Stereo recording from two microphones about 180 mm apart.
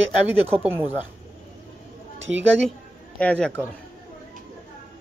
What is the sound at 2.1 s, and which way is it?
Speech, 90° right.